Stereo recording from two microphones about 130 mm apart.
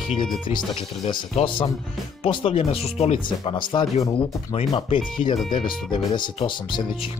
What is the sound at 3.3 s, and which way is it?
Speech, 40° left (ahead or behind).